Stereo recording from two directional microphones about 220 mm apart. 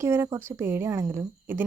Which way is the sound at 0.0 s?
10° right (ahead or behind).